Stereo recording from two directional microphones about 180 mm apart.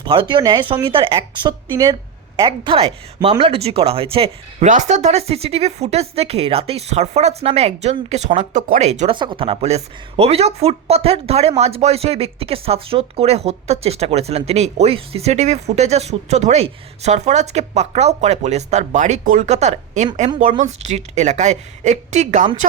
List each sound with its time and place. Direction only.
0.0 s speech: 30° right (ahead or behind)